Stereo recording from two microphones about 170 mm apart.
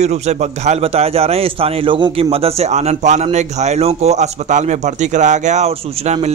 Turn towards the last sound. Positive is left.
turn(degrees=-40)  # may be behind; listen again after turning